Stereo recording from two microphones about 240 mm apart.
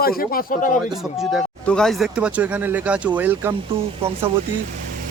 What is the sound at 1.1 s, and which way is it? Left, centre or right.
Speech, centre.